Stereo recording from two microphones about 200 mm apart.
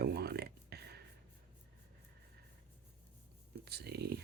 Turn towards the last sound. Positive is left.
turn(degrees=-55)  # may be behind; listen again after turning